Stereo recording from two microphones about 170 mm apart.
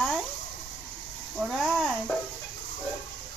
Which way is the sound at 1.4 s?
Centre (ahead or behind).